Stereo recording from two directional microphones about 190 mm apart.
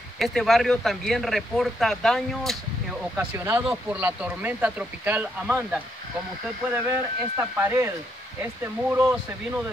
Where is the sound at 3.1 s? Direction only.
15° right (ahead or behind).